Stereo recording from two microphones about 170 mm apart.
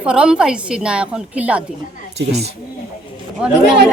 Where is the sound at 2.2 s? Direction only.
90° right.